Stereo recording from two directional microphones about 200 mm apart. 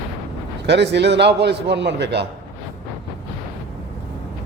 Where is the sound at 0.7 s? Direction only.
60° right (ahead or behind).